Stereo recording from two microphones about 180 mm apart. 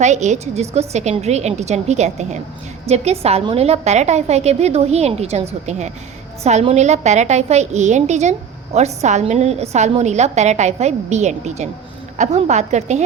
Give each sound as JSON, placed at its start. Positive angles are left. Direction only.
{"t": 0.0, "sound": "a woman's voice", "side_deg": -40}